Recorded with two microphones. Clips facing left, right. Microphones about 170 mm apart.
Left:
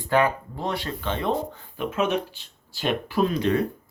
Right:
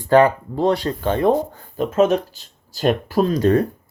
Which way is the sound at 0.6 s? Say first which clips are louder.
Right 9 dB; 40° right (ahead or behind).